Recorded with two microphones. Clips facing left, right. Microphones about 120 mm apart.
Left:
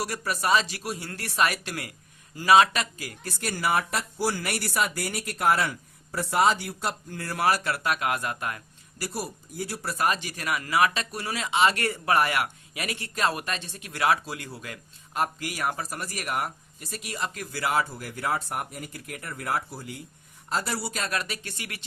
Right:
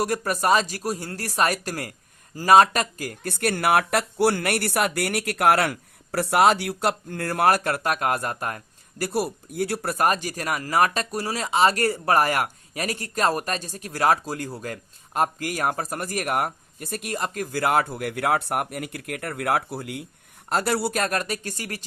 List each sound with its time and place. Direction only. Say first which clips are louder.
0.0 s speech: right 5 dB; 45° right (ahead or behind)